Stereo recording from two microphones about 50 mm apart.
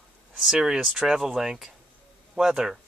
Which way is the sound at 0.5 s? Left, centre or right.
Centre.